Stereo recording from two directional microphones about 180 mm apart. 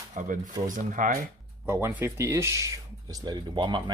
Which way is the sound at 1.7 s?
10° right (ahead or behind).